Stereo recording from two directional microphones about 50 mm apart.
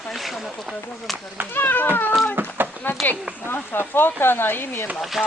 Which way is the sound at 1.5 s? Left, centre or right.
Left.